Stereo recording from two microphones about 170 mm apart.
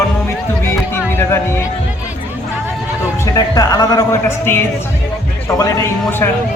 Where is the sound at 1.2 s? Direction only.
15° left (ahead or behind).